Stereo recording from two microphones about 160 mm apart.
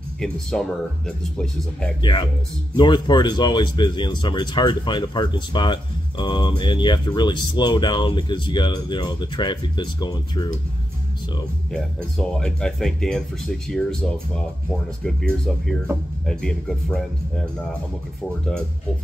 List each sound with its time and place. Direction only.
0.2 s speech: 5° left (ahead or behind)
2.0 s speech: 30° left (ahead or behind)
11.7 s speech: 5° left (ahead or behind)